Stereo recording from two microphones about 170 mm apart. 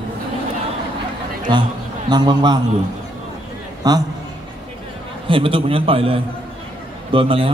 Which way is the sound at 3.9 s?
25° right (ahead or behind).